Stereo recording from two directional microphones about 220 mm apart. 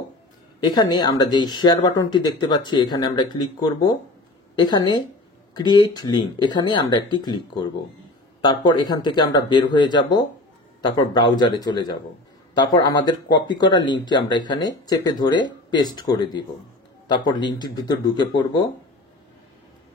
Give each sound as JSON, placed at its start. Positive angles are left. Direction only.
{"t": 0.6, "sound": "speech", "side_deg": 20}